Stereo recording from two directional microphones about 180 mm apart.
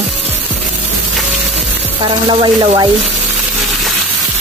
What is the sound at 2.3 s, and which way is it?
Speech, 25° right (ahead or behind).